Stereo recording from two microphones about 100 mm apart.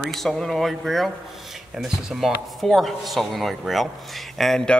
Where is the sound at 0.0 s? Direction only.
Centre (ahead or behind).